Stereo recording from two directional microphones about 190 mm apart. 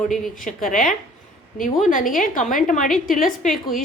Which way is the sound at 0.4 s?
45° left (ahead or behind).